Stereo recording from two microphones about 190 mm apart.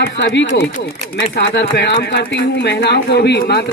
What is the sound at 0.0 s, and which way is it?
A man's voice, 65° left (ahead or behind).